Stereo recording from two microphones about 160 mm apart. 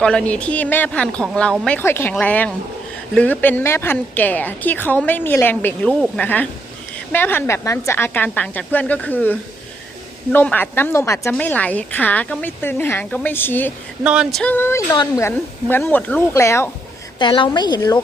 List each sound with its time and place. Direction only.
0.0 s a woman's voice: 5° left (ahead or behind)
14.0 s a sound: 5° right (ahead or behind)
14.5 s a woman's voice: 15° left (ahead or behind)
17.2 s speech: 30° left (ahead or behind)